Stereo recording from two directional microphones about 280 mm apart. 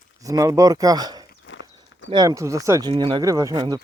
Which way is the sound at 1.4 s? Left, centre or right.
Left.